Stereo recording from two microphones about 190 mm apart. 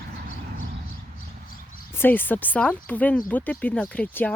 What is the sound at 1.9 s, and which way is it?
Speech, 10° left (ahead or behind).